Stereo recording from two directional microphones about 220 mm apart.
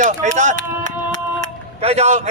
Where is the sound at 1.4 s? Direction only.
30° right (ahead or behind).